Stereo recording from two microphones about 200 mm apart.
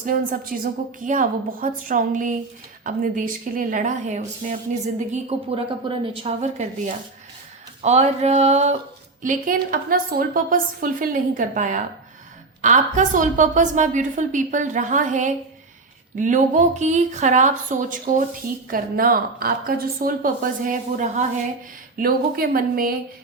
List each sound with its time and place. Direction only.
0.0 s a woman's voice: 45° right (ahead or behind)